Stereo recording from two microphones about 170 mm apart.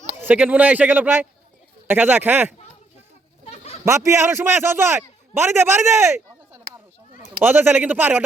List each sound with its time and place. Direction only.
0.2 s a man's voice: 10° right (ahead or behind)
3.5 s a sound: 35° left (ahead or behind)
3.8 s a man's voice: 15° right (ahead or behind)
7.4 s a man's voice: 10° right (ahead or behind)